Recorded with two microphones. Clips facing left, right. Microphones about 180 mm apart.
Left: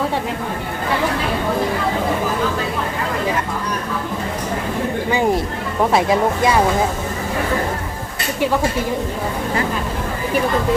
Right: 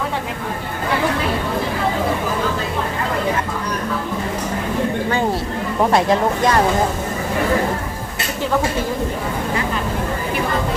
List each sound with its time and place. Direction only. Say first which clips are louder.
5.9 s speech: left 1 dB; 5° left (ahead or behind)